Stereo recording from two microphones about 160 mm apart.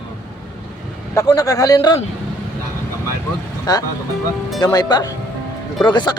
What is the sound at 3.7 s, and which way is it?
Speech, 25° left (ahead or behind).